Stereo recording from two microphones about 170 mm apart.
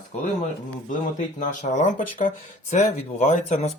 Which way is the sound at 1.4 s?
50° left (ahead or behind).